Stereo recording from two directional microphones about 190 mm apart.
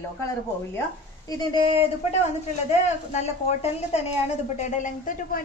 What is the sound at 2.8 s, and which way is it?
A woman's voice, 35° left (ahead or behind).